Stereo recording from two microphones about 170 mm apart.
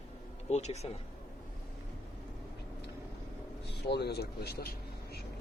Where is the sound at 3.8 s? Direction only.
75° left (ahead or behind).